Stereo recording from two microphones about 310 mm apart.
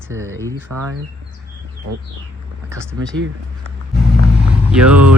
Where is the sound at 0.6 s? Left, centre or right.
Right.